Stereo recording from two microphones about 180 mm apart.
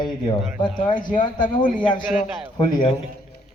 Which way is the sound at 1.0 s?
50° left (ahead or behind).